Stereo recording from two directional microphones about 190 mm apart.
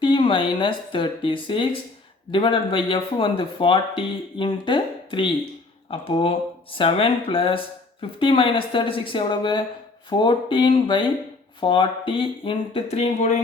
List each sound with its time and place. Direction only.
0.0 s speech: 25° left (ahead or behind)